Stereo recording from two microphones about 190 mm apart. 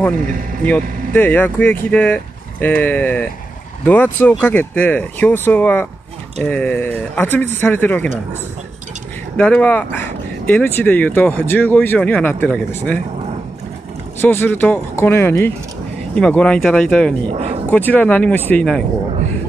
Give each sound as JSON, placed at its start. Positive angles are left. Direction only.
{"t": 0.7, "sound": "speech", "side_deg": 10}
{"t": 9.4, "sound": "speech", "side_deg": 5}
{"t": 14.2, "sound": "speech", "side_deg": 10}
{"t": 17.3, "sound": "speech", "side_deg": -35}
{"t": 17.6, "sound": "speech", "side_deg": 10}